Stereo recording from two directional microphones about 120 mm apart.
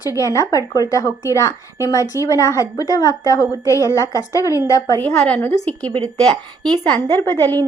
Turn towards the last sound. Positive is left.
turn(degrees=20)  # may be behind; listen again after turning